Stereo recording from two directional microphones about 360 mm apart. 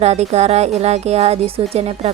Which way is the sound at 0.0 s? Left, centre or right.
Centre.